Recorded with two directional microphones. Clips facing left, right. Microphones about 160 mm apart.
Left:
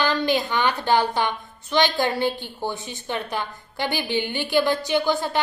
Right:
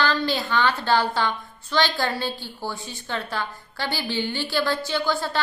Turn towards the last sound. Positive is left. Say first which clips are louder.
# left 3 dB
turn(degrees=20)  # may be behind; listen again after turning